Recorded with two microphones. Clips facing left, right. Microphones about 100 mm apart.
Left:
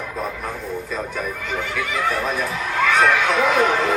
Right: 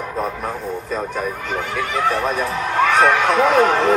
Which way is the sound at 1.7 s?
35° right (ahead or behind).